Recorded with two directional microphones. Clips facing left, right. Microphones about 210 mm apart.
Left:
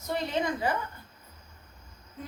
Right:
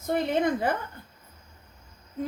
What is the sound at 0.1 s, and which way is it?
Speech, 50° right (ahead or behind).